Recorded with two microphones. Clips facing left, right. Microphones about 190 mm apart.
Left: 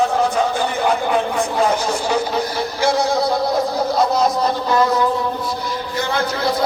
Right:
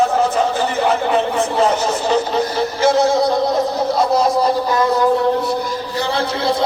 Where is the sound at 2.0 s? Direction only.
10° left (ahead or behind).